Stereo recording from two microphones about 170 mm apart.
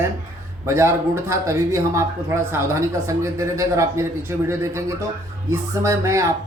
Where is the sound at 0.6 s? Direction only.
15° right (ahead or behind).